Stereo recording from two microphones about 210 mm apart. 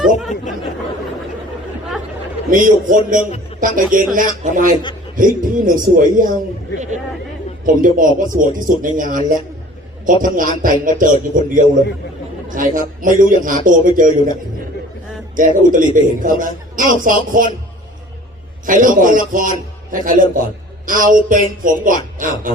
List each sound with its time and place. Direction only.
2.5 s a man's voice: 40° right (ahead or behind)
7.6 s a man's voice: 40° right (ahead or behind)
15.4 s a man's voice: 40° right (ahead or behind)
18.6 s a man's voice: 40° right (ahead or behind)